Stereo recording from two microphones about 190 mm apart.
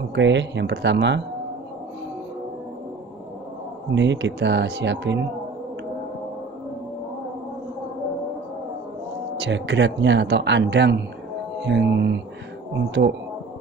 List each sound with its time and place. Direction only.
0.1 s speech: 70° right (ahead or behind)
3.9 s speech: 70° right (ahead or behind)
9.4 s speech: 70° right (ahead or behind)